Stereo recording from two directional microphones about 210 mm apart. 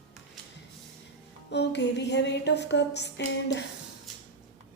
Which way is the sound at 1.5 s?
55° left (ahead or behind).